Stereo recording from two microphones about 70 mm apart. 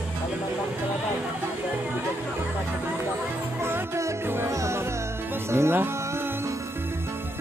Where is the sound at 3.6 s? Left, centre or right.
Right.